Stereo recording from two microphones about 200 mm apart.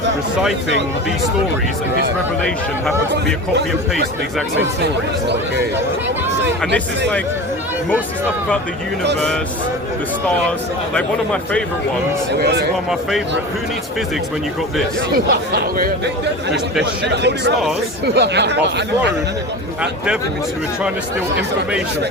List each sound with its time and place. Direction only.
10.9 s speech: 5° left (ahead or behind)
12.3 s speech: 55° right (ahead or behind)
12.9 s speech: centre (ahead or behind)
15.1 s speech: 50° right (ahead or behind)
18.0 s speech: 55° right (ahead or behind)